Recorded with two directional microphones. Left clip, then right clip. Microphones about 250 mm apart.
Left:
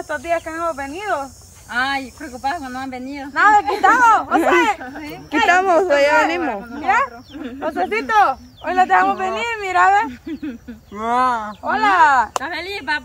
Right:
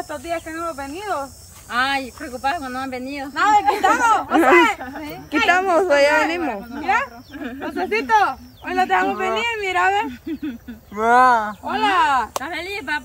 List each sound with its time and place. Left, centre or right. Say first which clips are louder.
0.1 s speech: left 9 dB; centre
1.7 s speech: even; centre
3.3 s speech: left 2 dB; centre
11.0 s speech: right 4 dB; centre
11.6 s speech: left 9 dB; centre